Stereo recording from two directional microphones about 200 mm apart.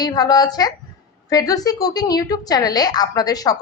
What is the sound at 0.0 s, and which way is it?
A woman's voice, 20° left (ahead or behind).